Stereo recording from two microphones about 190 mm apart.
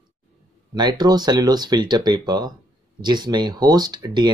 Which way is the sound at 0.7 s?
20° right (ahead or behind).